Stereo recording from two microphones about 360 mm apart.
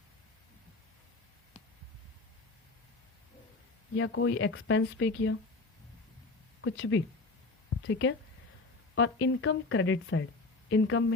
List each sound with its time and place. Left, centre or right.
3.9 s speech: left
6.6 s speech: left